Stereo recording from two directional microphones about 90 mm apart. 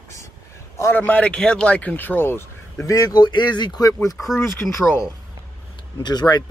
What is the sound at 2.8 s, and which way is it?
Speech, 40° left (ahead or behind).